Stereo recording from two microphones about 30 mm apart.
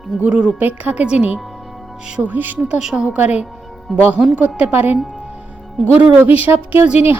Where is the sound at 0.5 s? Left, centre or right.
Right.